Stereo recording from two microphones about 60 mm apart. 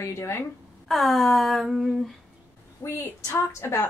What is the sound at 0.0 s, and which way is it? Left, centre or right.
Speech, left.